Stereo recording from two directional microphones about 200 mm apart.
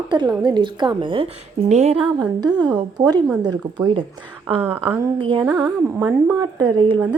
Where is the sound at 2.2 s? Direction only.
20° right (ahead or behind).